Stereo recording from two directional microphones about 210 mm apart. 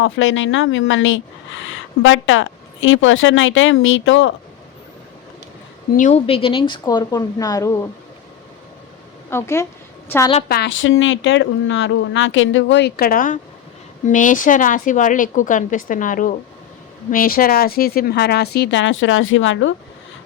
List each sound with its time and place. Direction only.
0.0 s speech: 65° left (ahead or behind)
6.0 s speech: 30° left (ahead or behind); by 7.9 s 15° left (ahead or behind)
9.3 s a woman's voice: 15° left (ahead or behind)
10.5 s a woman's voice: 55° left (ahead or behind)